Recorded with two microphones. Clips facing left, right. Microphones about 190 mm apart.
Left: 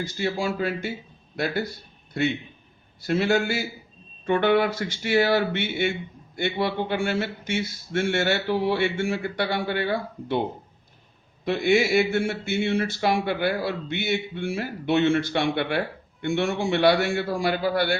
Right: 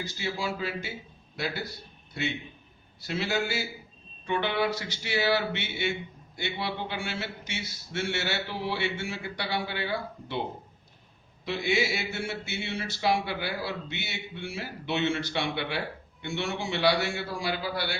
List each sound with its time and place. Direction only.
0.0 s speech: 50° left (ahead or behind)
2.2 s speech: 50° left (ahead or behind)
11.4 s speech: 55° left (ahead or behind)